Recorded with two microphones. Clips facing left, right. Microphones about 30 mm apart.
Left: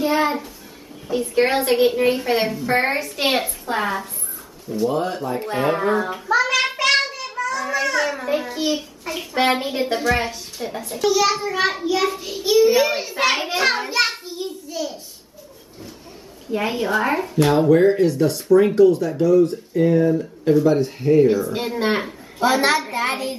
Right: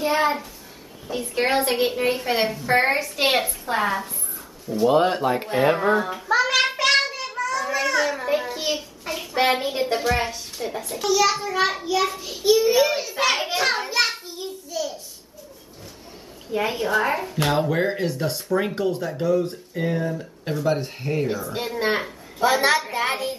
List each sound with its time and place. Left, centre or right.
0.0 s a woman's voice: centre
4.8 s speech: right
5.8 s a woman's voice: centre
6.2 s a child's voice: centre
6.8 s child singing: centre
7.5 s a child's voice: centre
16.5 s a woman's voice: centre
17.4 s speech: centre
20.0 s a woman's voice: centre
20.6 s speech: centre
21.3 s speech: centre